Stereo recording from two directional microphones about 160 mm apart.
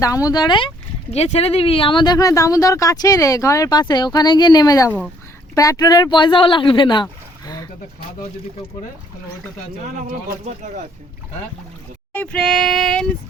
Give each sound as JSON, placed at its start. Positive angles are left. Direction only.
{"t": 0.0, "sound": "speech", "side_deg": 20}
{"t": 1.1, "sound": "speech", "side_deg": 40}
{"t": 10.4, "sound": "speech", "side_deg": -50}
{"t": 12.1, "sound": "child singing", "side_deg": 5}